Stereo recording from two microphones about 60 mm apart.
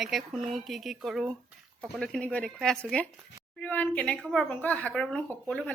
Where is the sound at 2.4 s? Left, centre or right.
Centre.